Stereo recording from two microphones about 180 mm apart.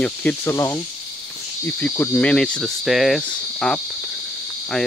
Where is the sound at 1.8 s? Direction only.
10° left (ahead or behind).